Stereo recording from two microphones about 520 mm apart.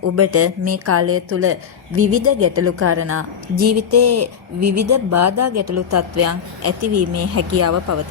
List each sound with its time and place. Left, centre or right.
0.2 s a woman's voice: right